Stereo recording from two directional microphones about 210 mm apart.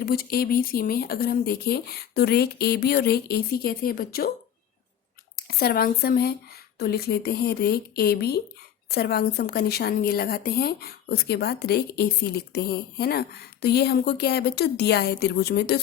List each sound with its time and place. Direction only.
0.0 s speech: 45° left (ahead or behind)
5.4 s speech: 45° left (ahead or behind)